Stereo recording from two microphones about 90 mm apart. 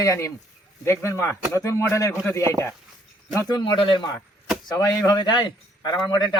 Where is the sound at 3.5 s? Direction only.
55° left (ahead or behind).